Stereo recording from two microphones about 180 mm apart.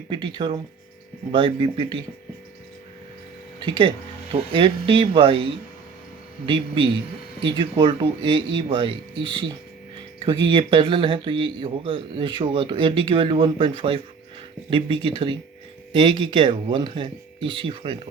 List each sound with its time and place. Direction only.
0.1 s speech: 25° right (ahead or behind)
3.6 s speech: 25° right (ahead or behind)